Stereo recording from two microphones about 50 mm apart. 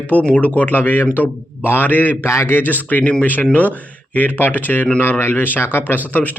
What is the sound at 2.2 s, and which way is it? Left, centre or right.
Speech, left.